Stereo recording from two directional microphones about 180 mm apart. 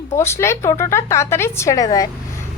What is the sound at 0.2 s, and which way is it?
Speech, 15° left (ahead or behind).